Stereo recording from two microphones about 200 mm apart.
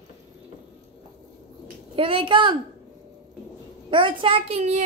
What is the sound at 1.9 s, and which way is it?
Speech, 25° right (ahead or behind).